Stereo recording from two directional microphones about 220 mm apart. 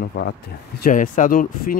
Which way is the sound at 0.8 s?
35° left (ahead or behind).